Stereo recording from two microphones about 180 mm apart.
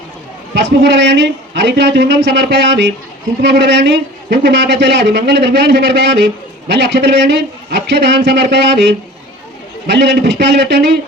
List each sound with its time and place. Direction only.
0.5 s speech: 75° right (ahead or behind)